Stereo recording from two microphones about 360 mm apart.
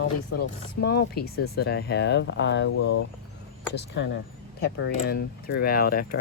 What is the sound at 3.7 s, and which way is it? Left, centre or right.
Speech, left.